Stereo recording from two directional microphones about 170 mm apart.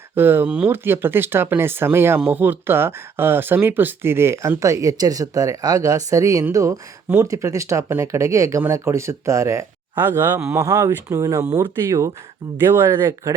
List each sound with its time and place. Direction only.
0.2 s speech: 10° right (ahead or behind)